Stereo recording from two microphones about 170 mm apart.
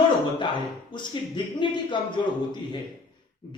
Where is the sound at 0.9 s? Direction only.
25° left (ahead or behind).